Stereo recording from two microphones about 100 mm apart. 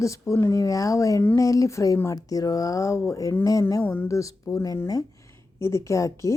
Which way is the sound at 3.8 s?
20° left (ahead or behind).